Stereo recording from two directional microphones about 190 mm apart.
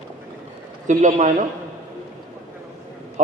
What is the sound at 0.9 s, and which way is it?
Speech, 40° right (ahead or behind).